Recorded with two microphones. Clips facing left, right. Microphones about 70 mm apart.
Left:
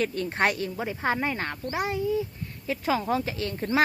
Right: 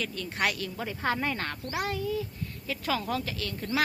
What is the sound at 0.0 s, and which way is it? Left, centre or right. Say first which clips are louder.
A woman's voice: left 5 dB; left.